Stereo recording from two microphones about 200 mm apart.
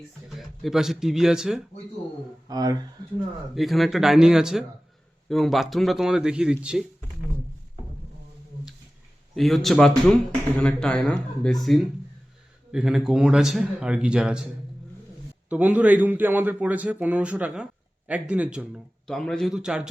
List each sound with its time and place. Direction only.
0.3 s a man's voice: centre (ahead or behind)
2.5 s speech: 20° right (ahead or behind)
3.5 s a man's voice: centre (ahead or behind)
9.3 s a man's voice: centre (ahead or behind)
15.4 s a man's voice: 5° right (ahead or behind)